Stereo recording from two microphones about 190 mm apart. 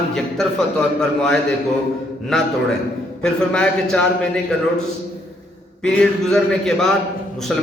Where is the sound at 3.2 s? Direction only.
5° left (ahead or behind).